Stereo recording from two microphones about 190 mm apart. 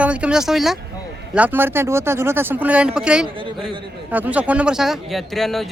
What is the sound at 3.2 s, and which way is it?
Speech, 25° right (ahead or behind).